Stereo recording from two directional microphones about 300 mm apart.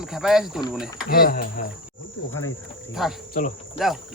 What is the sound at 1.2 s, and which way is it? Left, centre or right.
Speech, left.